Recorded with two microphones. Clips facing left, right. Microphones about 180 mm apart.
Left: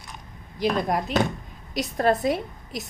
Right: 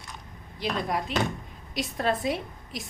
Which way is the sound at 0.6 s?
45° left (ahead or behind).